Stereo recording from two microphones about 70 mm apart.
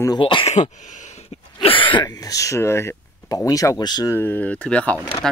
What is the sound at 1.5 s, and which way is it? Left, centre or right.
Speech, left.